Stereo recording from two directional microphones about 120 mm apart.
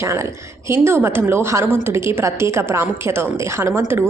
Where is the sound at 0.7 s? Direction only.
20° right (ahead or behind).